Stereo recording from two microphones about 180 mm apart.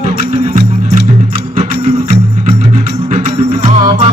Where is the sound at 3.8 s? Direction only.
35° right (ahead or behind).